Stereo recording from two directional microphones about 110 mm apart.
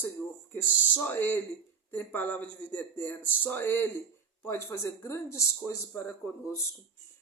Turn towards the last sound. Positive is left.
turn(degrees=20)  # may be behind; listen again after turning